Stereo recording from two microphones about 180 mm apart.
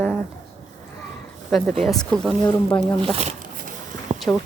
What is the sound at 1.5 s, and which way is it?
Speech, centre (ahead or behind).